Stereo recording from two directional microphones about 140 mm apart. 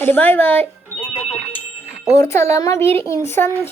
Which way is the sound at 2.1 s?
20° left (ahead or behind).